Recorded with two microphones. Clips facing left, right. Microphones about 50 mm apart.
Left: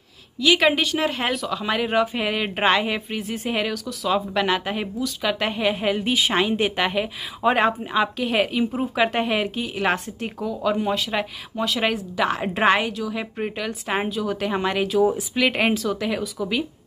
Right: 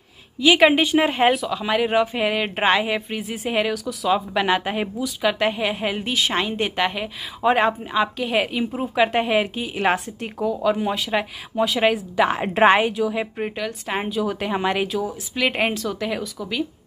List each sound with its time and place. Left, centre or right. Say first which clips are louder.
0.4 s a woman's voice: right 3 dB; centre
1.3 s a woman's voice: right 2 dB; centre
6.0 s a woman's voice: left 2 dB; centre
13.7 s a woman's voice: left 1 dB; centre